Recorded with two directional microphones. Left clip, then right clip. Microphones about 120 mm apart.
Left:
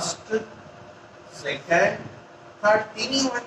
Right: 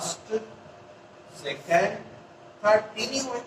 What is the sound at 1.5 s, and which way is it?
A man's voice, 30° left (ahead or behind).